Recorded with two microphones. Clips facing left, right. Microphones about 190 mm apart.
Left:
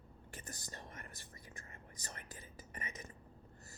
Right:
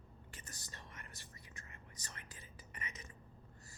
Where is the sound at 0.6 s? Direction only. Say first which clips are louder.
Left 4 dB; 45° left (ahead or behind).